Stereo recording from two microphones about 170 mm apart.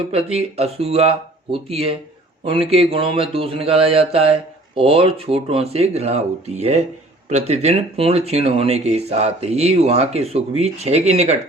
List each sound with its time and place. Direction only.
0.1 s speech: 35° right (ahead or behind)